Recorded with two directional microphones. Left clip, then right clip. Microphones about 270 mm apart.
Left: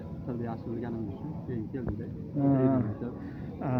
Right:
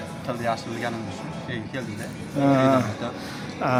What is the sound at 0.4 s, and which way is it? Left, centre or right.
Speech, right.